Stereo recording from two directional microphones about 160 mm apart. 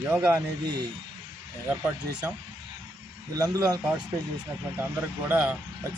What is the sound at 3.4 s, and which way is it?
Speech, 20° right (ahead or behind).